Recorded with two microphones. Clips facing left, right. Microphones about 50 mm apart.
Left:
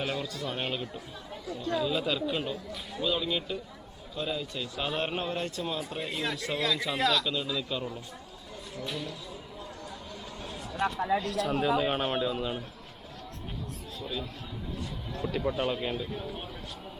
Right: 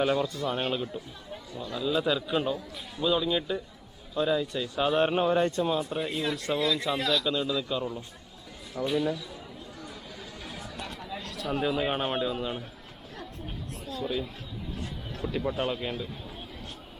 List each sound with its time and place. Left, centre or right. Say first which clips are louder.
0.0 s speech: right 7 dB; centre
10.8 s speech: left 14 dB; left
11.3 s speech: left 2 dB; centre
13.8 s speech: right 6 dB; right
15.3 s speech: even; centre